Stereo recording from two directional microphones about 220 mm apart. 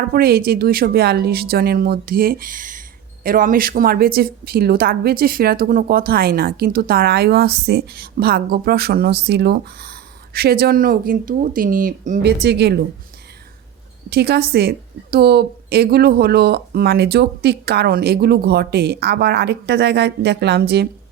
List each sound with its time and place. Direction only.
0.1 s a woman's voice: 45° right (ahead or behind)
14.1 s a woman's voice: 45° right (ahead or behind)